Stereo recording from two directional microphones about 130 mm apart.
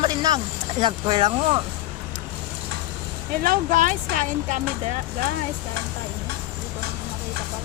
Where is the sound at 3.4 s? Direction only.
80° right.